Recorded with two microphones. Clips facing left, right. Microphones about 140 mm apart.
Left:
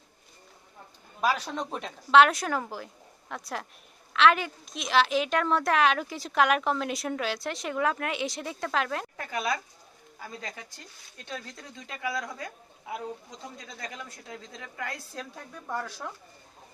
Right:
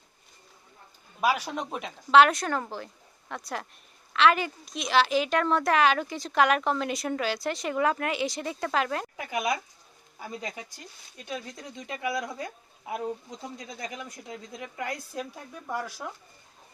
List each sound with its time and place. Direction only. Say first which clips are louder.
1.2 s a woman's voice: right 1 dB; 10° right (ahead or behind)
9.2 s a woman's voice: right 2 dB; 15° right (ahead or behind)